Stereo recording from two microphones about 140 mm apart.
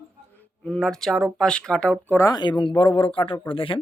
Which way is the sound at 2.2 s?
30° left (ahead or behind).